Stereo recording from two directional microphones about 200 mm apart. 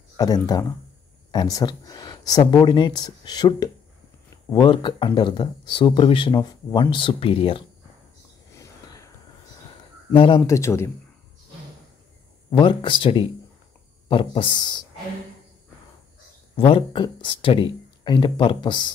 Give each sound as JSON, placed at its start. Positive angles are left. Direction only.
{"t": 0.5, "sound": "speech", "side_deg": 20}
{"t": 8.5, "sound": "whispering", "side_deg": 15}
{"t": 10.1, "sound": "speech", "side_deg": 25}
{"t": 10.4, "sound": "speech", "side_deg": 15}
{"t": 12.4, "sound": "speech", "side_deg": 25}
{"t": 16.5, "sound": "speech", "side_deg": 30}